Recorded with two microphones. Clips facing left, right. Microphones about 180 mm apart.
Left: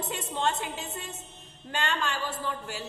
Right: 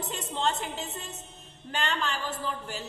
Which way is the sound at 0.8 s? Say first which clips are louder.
Even; 20° right (ahead or behind).